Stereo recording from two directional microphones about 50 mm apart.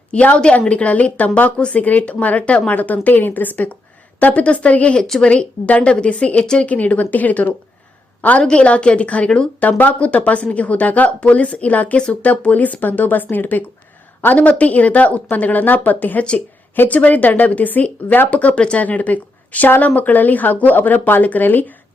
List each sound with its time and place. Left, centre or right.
0.1 s a woman's voice: left
4.9 s a woman's voice: centre
5.2 s a woman's voice: left
6.4 s a woman's voice: centre
6.7 s speech: left
8.4 s a woman's voice: left
9.6 s a woman's voice: left